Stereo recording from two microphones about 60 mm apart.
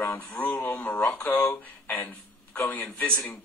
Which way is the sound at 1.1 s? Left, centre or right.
Centre.